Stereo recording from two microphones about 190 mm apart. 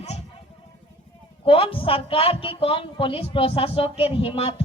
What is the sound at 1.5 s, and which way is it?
Speech, 30° left (ahead or behind).